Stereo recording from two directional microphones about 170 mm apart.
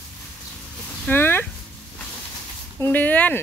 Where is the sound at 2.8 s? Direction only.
10° left (ahead or behind).